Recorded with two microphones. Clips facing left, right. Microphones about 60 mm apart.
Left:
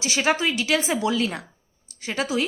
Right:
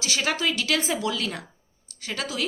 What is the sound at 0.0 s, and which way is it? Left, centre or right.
A woman's voice, centre.